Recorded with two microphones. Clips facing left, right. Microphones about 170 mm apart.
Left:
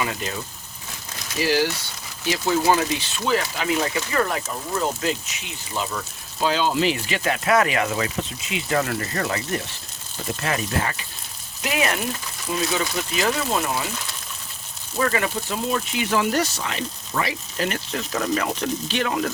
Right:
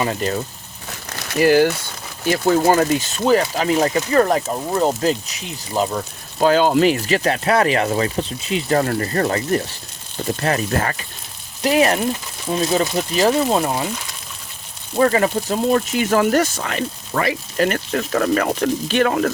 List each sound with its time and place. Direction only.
0.0 s speech: 40° right (ahead or behind)
0.9 s crumpling: 65° right (ahead or behind)
2.2 s speech: 50° right (ahead or behind)
6.4 s speech: 50° right (ahead or behind)
11.6 s speech: 35° right (ahead or behind)
14.9 s speech: 35° right (ahead or behind); by 19.3 s 55° right (ahead or behind)